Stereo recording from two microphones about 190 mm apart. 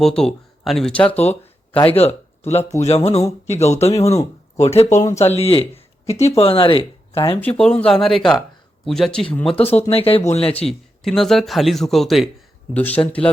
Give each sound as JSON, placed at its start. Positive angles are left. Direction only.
{"t": 0.0, "sound": "speech", "side_deg": 5}
{"t": 1.0, "sound": "speech", "side_deg": 35}
{"t": 7.3, "sound": "speech", "side_deg": 5}
{"t": 9.6, "sound": "speech", "side_deg": 30}
{"t": 10.7, "sound": "speech", "side_deg": 0}